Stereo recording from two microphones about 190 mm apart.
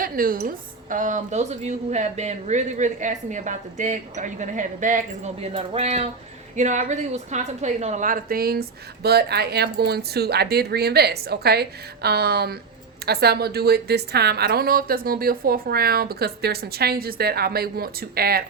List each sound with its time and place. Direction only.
0.0 s a woman's voice: 50° right (ahead or behind)